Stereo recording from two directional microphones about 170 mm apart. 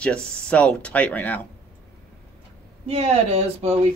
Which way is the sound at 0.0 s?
5° left (ahead or behind).